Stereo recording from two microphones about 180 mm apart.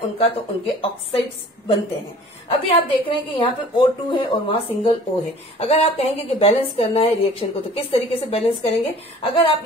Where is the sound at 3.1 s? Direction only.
25° left (ahead or behind).